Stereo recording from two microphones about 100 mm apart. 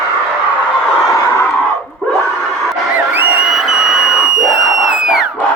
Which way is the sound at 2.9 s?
20° right (ahead or behind).